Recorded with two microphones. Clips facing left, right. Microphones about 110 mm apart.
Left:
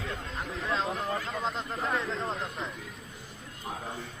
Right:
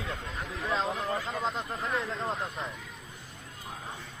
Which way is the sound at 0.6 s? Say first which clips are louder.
Right 1 dB; 10° right (ahead or behind).